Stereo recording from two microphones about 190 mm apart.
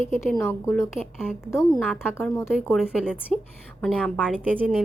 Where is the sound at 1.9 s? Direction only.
10° left (ahead or behind).